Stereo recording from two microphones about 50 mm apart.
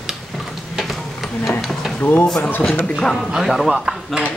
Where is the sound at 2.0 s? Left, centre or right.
Left.